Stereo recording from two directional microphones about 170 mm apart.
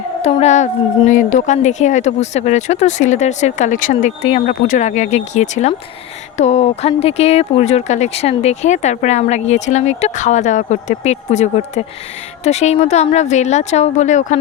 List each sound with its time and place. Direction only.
0.2 s a woman's voice: 40° left (ahead or behind)
4.2 s a woman's voice: 40° left (ahead or behind)